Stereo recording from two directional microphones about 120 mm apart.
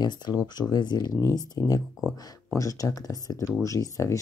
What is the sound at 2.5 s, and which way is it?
Speech, 30° left (ahead or behind).